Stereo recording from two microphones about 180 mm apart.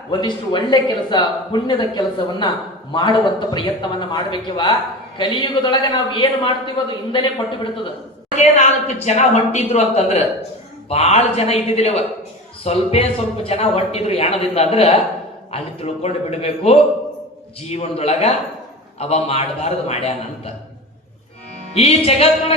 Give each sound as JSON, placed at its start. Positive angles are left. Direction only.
{"t": 0.1, "sound": "a man's voice", "side_deg": 25}
{"t": 9.0, "sound": "a man's voice", "side_deg": 40}
{"t": 21.8, "sound": "a man's voice", "side_deg": 35}